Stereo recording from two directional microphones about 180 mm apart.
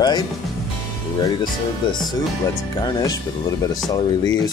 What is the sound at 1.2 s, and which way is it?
Speech, 25° left (ahead or behind).